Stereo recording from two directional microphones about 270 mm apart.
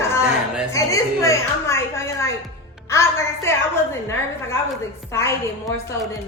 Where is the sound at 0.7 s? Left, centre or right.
Centre.